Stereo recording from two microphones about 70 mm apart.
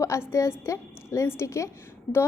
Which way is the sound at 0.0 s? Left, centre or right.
Left.